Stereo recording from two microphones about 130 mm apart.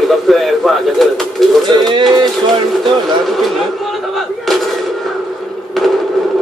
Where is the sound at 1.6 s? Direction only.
35° right (ahead or behind).